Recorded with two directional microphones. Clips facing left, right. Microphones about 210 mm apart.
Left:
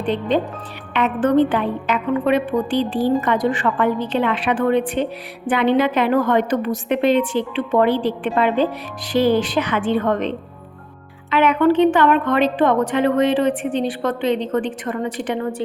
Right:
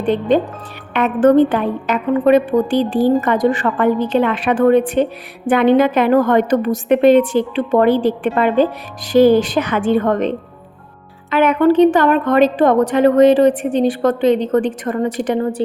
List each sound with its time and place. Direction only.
0.0 s a woman's voice: 45° right (ahead or behind)